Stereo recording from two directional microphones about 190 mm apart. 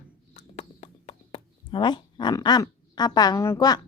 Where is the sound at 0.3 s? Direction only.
35° left (ahead or behind).